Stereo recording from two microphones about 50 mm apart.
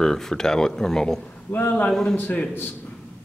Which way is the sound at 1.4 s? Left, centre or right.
Left.